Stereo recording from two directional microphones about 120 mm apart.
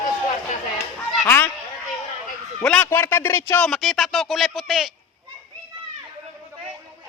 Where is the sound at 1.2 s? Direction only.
20° left (ahead or behind).